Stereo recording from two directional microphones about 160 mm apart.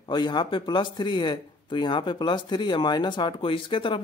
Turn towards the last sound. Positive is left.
turn(degrees=30)  # may be behind; listen again after turning